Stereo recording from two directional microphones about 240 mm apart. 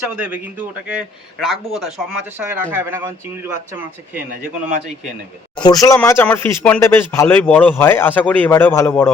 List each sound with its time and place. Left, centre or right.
0.2 s a man's voice: centre
5.5 s speech: centre